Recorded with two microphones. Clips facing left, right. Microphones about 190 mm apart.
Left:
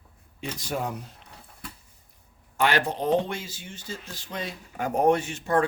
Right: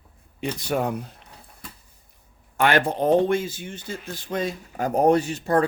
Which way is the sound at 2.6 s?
55° right (ahead or behind).